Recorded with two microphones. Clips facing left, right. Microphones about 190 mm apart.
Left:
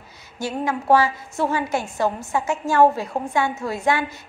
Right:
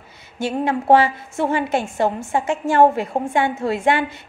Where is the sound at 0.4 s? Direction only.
25° right (ahead or behind).